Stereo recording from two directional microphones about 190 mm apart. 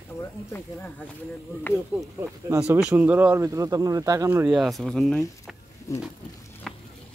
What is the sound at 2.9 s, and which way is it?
Speech, 10° right (ahead or behind).